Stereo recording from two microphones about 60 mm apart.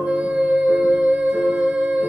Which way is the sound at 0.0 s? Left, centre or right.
Centre.